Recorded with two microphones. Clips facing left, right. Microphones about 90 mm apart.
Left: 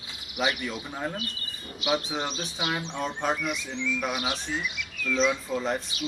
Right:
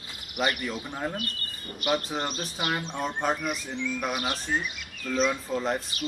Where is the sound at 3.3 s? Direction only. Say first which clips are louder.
Even; 45° right (ahead or behind).